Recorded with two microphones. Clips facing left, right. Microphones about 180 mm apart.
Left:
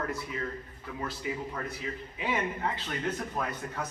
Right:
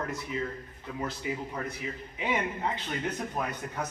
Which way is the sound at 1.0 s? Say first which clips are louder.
Right 1 dB; 20° right (ahead or behind).